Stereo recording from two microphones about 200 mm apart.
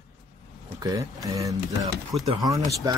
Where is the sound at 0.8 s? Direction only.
15° right (ahead or behind).